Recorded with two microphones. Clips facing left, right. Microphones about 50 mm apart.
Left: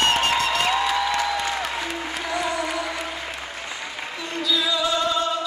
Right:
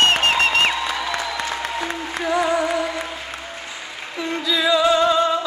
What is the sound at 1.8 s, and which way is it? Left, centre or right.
Music, right.